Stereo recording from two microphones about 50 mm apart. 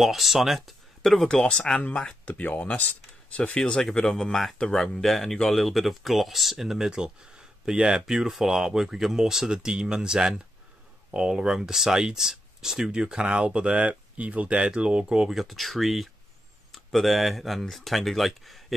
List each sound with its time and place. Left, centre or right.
0.0 s speech: centre
1.4 s speech: centre
3.5 s speech: centre; by 15.2 s right
15.2 s speech: centre